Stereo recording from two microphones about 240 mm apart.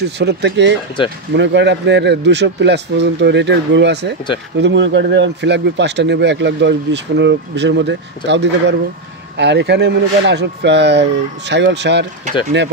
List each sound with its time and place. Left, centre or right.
0.0 s speech: right